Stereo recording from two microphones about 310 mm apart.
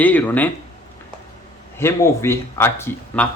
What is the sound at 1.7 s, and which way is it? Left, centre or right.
Speech, centre.